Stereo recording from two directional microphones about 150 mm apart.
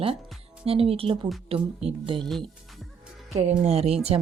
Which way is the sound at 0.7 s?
40° right (ahead or behind).